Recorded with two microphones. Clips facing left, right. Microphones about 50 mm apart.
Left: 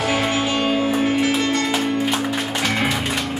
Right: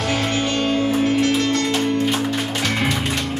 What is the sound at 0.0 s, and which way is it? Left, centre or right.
Music, centre.